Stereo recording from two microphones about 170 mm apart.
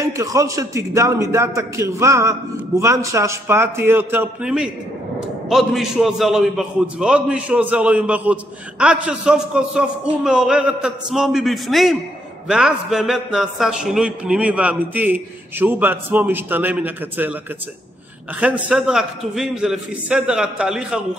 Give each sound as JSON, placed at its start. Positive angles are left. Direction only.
{"t": 0.0, "sound": "a man's voice", "side_deg": -20}
{"t": 18.4, "sound": "a man's voice", "side_deg": -5}